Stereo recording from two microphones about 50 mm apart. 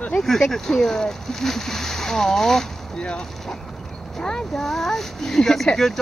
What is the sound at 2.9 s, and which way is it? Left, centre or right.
Speech, centre.